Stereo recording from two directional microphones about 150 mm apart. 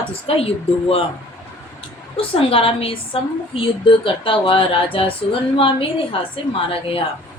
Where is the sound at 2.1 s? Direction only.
40° left (ahead or behind).